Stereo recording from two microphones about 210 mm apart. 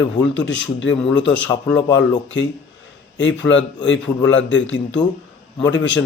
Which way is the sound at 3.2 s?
60° left (ahead or behind).